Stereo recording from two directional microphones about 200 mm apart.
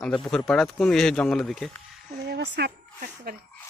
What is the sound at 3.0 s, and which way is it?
Speech, 45° right (ahead or behind).